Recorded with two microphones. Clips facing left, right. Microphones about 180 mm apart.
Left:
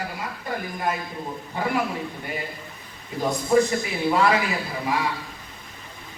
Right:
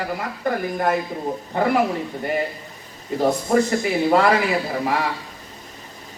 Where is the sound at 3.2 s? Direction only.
60° right (ahead or behind).